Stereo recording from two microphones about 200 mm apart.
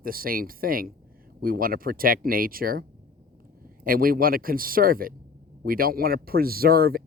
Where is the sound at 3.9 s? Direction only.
45° right (ahead or behind).